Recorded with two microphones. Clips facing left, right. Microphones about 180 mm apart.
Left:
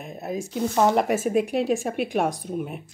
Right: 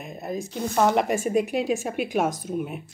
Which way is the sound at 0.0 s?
5° left (ahead or behind).